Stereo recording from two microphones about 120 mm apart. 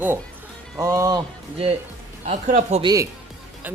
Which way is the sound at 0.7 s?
25° right (ahead or behind).